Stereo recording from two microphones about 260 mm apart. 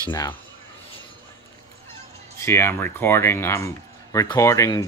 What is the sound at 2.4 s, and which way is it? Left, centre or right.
Speech, centre.